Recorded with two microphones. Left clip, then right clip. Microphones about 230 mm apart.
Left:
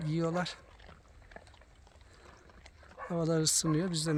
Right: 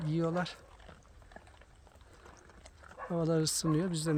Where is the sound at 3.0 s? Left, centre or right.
Centre.